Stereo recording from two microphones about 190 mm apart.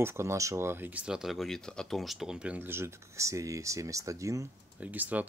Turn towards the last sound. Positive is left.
turn(degrees=-10)  # may be behind; listen again after turning